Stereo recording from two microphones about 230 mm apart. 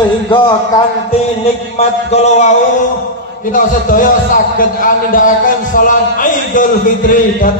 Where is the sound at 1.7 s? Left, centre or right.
Left.